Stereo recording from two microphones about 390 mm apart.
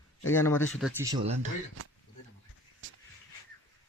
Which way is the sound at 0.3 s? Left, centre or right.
Centre.